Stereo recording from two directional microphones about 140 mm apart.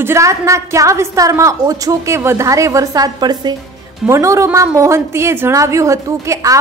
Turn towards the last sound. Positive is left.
turn(degrees=-20)  # may be behind; listen again after turning